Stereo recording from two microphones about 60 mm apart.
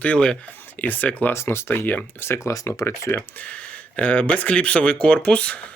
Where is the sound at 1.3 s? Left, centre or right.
Left.